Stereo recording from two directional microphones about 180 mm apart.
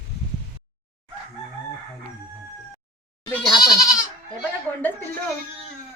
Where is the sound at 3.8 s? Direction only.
20° left (ahead or behind).